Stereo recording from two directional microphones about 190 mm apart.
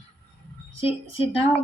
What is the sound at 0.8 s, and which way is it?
Speech, 30° left (ahead or behind).